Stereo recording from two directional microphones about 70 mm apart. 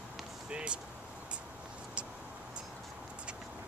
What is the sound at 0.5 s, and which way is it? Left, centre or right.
Vehicle, centre.